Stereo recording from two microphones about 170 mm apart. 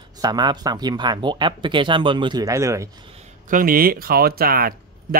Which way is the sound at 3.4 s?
55° right (ahead or behind).